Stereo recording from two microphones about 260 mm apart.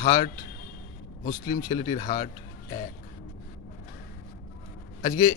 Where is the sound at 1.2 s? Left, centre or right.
Left.